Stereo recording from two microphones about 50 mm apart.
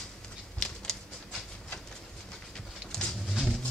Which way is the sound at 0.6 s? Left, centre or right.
Centre.